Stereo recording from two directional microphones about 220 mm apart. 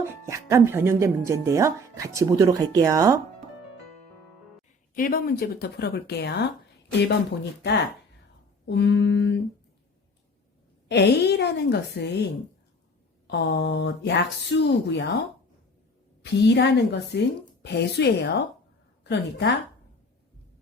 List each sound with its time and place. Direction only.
0.1 s speech: 15° right (ahead or behind)
4.9 s a woman's voice: 40° left (ahead or behind)
8.6 s a woman's voice: 50° left (ahead or behind)
10.8 s a woman's voice: 50° left (ahead or behind)
13.2 s a woman's voice: 50° left (ahead or behind)
16.2 s a woman's voice: 50° left (ahead or behind)